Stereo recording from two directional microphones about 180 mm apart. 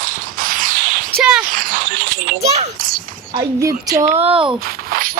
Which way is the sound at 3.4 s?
20° right (ahead or behind).